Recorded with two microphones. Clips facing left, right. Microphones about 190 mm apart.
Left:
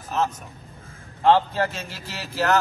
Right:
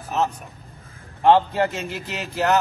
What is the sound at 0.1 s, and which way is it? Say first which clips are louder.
A man's voice: right 1 dB; 15° right (ahead or behind).